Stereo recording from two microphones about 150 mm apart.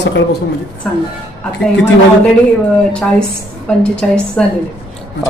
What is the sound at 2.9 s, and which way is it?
A woman's voice, 5° left (ahead or behind).